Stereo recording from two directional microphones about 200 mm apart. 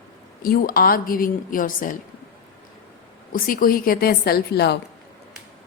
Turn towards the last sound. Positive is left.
turn(degrees=55)  # may be behind; listen again after turning